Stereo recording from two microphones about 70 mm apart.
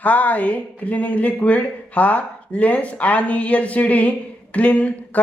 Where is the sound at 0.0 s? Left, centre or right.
Left.